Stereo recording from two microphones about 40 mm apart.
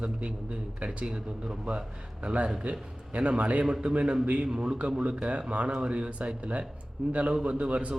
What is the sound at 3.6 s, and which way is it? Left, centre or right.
A man's voice, right.